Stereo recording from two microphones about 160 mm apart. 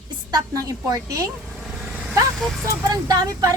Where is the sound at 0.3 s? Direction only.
20° right (ahead or behind).